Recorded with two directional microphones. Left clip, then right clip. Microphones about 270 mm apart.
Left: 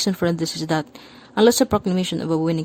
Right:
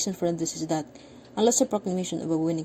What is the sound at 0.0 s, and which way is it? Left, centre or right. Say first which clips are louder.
Speech: left 6 dB; left.